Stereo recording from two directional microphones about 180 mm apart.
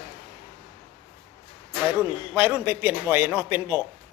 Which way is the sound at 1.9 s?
10° right (ahead or behind).